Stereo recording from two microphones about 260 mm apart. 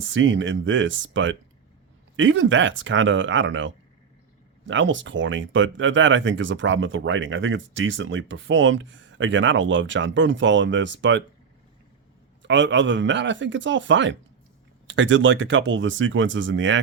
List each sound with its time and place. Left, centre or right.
0.1 s speech: right
12.4 s speech: right